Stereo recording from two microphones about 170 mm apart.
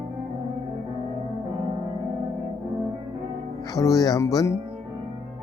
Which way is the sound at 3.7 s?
20° left (ahead or behind).